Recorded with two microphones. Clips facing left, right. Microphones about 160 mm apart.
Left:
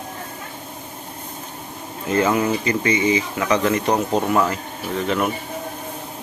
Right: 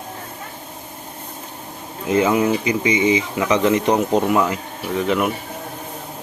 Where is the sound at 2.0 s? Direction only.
15° right (ahead or behind).